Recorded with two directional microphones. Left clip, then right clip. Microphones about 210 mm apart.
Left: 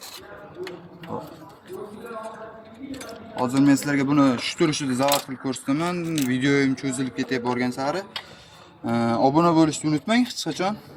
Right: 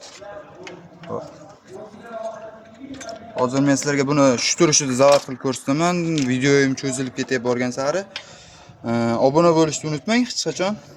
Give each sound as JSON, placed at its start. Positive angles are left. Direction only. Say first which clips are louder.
{"t": 1.1, "sound": "speech", "louder": "right 4 dB", "side_deg": -30}
{"t": 3.1, "sound": "speech", "louder": "right 5 dB", "side_deg": -35}